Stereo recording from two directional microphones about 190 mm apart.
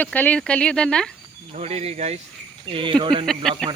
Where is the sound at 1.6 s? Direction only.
35° right (ahead or behind).